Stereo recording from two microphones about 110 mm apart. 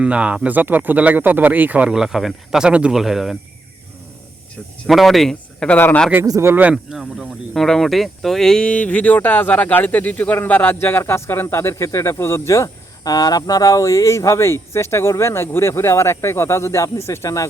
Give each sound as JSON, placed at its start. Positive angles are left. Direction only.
{"t": 0.0, "sound": "speech", "side_deg": -10}
{"t": 4.9, "sound": "speech", "side_deg": 0}
{"t": 6.2, "sound": "speech", "side_deg": -30}
{"t": 6.5, "sound": "speech", "side_deg": -15}